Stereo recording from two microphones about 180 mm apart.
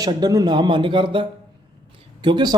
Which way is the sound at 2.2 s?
25° right (ahead or behind).